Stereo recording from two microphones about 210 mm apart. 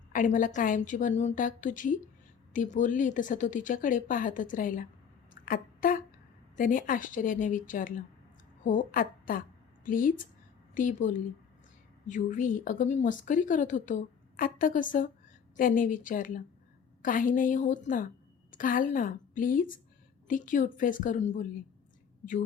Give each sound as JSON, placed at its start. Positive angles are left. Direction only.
{"t": 0.1, "sound": "a woman's voice", "side_deg": 40}
{"t": 5.3, "sound": "a sound", "side_deg": 40}
{"t": 6.6, "sound": "a woman's voice", "side_deg": 40}